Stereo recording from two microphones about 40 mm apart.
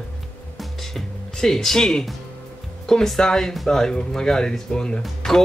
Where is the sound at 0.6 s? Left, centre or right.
Centre.